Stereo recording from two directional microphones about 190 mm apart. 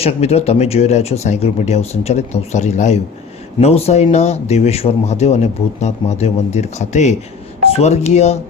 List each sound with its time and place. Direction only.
0.0 s speech: 35° left (ahead or behind)